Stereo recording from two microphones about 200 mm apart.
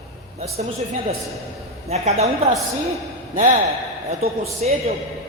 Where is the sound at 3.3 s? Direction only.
40° right (ahead or behind).